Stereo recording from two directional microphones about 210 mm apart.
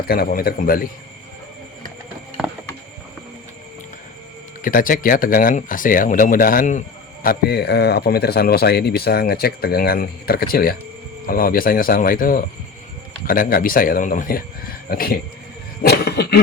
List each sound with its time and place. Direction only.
0.1 s speech: 45° left (ahead or behind)
4.6 s speech: 40° left (ahead or behind)
15.8 s a sound: 50° left (ahead or behind)